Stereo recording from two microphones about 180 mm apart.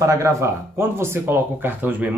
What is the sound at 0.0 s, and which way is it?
Speech, 15° right (ahead or behind).